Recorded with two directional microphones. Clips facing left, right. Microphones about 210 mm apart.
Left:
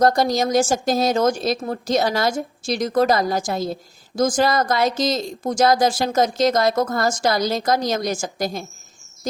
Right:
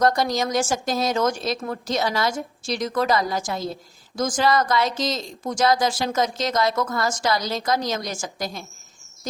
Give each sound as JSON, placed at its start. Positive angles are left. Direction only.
{"t": 0.0, "sound": "a woman's voice", "side_deg": 35}